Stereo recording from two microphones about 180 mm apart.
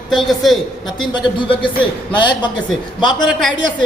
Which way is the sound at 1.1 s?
25° left (ahead or behind).